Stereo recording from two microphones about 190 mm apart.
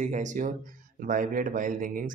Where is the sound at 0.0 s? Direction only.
40° right (ahead or behind).